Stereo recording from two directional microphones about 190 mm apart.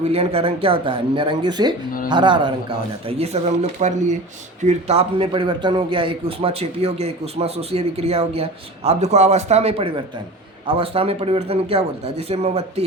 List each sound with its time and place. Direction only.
0.1 s a man's voice: 30° right (ahead or behind)